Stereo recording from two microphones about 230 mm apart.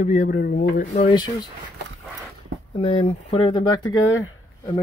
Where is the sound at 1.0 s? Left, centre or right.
Centre.